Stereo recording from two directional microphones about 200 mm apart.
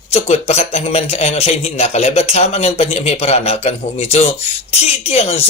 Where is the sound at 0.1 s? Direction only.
30° left (ahead or behind).